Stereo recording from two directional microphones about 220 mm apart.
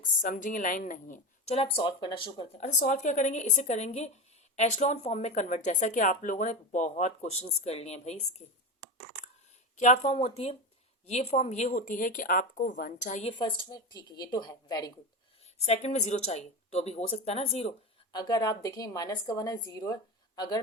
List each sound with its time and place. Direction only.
0.0 s speech: 40° left (ahead or behind)
9.7 s a woman's voice: 30° left (ahead or behind)
15.6 s a woman's voice: 30° left (ahead or behind)